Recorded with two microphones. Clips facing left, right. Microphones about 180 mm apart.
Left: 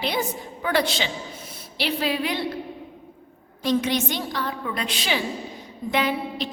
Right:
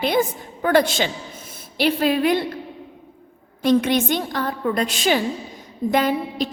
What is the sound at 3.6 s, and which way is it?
A woman's voice, 55° right (ahead or behind).